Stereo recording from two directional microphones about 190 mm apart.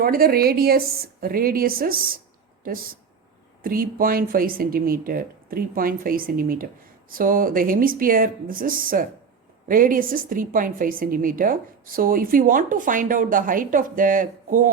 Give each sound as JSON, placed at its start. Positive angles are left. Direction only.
{"t": 0.0, "sound": "a woman's voice", "side_deg": -50}